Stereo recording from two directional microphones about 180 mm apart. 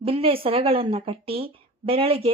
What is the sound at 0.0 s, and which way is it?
A woman's voice, 30° right (ahead or behind).